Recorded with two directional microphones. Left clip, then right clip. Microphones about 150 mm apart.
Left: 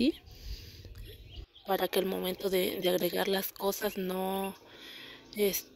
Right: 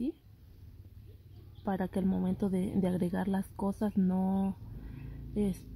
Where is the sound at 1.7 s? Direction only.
20° left (ahead or behind).